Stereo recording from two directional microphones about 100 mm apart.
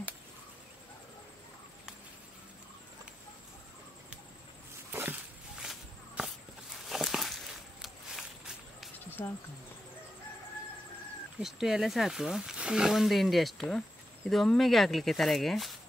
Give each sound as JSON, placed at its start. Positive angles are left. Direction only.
{"t": 4.9, "sound": "dog", "side_deg": -20}
{"t": 5.6, "sound": "walk", "side_deg": -5}
{"t": 6.8, "sound": "a sound", "side_deg": 0}
{"t": 9.2, "sound": "insect", "side_deg": 20}
{"t": 11.3, "sound": "speech", "side_deg": -5}